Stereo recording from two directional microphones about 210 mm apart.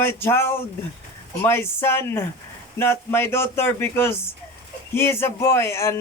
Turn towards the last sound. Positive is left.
turn(degrees=10)  # may be behind; listen again after turning